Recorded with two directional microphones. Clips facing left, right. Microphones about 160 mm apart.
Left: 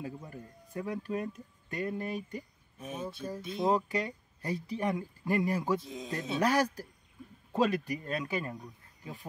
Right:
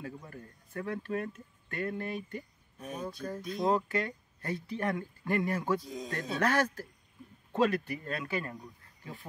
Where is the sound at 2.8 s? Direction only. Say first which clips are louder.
Even; 5° left (ahead or behind).